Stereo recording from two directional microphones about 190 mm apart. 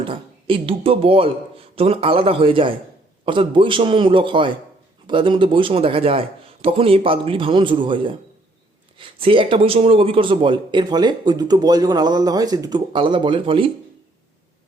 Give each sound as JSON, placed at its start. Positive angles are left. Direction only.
{"t": 0.0, "sound": "speech", "side_deg": -25}